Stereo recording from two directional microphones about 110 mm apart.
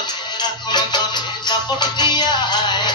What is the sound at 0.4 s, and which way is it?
Music, 40° left (ahead or behind).